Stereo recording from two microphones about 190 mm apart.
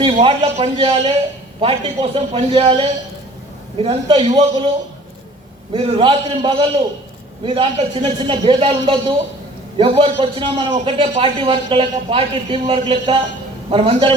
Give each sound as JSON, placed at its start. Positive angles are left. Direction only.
{"t": 0.0, "sound": "a man's voice", "side_deg": -30}
{"t": 5.7, "sound": "a man's voice", "side_deg": -25}